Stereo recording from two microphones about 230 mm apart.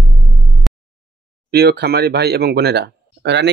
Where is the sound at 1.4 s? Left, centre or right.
Right.